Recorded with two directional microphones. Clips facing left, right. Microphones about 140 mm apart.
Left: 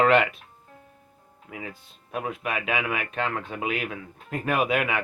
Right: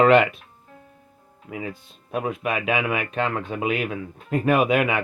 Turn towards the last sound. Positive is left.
turn(degrees=-15)  # may be behind; listen again after turning